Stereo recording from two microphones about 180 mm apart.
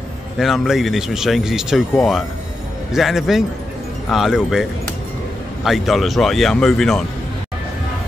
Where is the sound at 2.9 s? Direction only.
Centre (ahead or behind).